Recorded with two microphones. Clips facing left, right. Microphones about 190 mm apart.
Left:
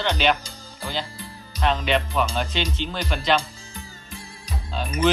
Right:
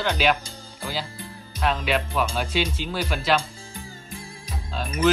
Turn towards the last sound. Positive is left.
turn(degrees=-5)  # may be behind; listen again after turning